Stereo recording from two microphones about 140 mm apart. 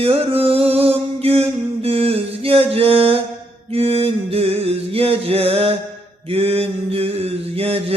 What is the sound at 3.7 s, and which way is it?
Music, 45° right (ahead or behind).